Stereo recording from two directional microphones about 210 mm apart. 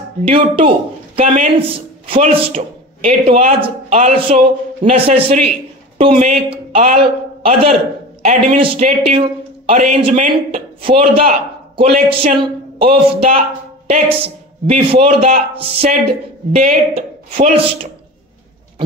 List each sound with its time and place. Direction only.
0.2 s a man's voice: 25° right (ahead or behind)